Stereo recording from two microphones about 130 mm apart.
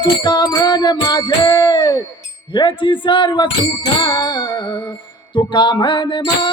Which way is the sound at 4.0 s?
30° left (ahead or behind).